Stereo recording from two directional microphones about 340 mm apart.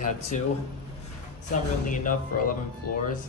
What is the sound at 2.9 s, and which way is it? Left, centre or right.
Speech, left.